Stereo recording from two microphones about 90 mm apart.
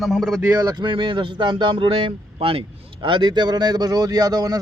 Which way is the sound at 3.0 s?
60° right (ahead or behind).